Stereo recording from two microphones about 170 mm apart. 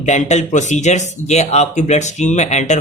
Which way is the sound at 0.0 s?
45° left (ahead or behind).